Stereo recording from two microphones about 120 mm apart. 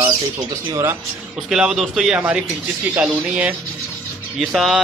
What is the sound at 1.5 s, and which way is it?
A man's voice, 5° right (ahead or behind).